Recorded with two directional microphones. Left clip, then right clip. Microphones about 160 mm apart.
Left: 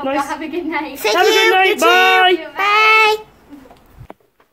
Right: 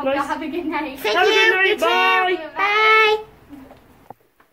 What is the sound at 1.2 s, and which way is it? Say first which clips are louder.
A woman's voice: left 3 dB; 25° left (ahead or behind).